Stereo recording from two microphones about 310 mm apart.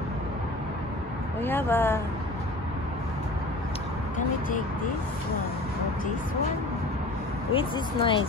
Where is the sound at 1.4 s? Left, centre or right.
Centre.